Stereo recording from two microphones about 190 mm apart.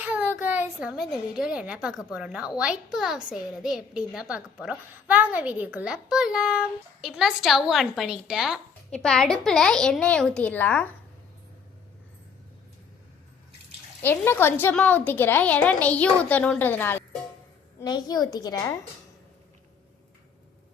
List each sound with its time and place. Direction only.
0.0 s a child's voice: 10° right (ahead or behind); by 10.8 s 10° left (ahead or behind)
14.0 s a woman's voice: 10° left (ahead or behind)
17.7 s a woman's voice: 20° left (ahead or behind)